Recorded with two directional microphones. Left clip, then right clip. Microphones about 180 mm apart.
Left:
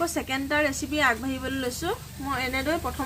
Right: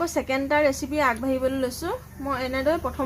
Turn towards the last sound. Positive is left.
turn(degrees=-50)  # may be behind; listen again after turning